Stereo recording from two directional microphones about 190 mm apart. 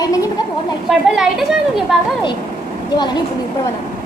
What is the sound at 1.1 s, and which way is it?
Speech, centre (ahead or behind).